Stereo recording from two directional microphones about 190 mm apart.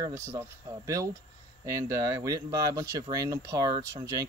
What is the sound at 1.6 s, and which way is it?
Speech, 15° right (ahead or behind).